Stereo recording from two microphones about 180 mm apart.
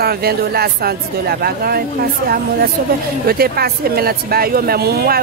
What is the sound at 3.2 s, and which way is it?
Speech, 60° right (ahead or behind).